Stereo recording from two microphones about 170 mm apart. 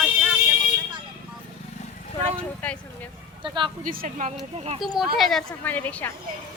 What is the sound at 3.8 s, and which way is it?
Speech, 55° right (ahead or behind).